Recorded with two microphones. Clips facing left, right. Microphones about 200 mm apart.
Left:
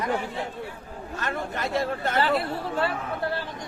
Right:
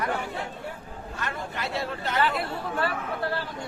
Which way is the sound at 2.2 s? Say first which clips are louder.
Left 2 dB; 30° left (ahead or behind).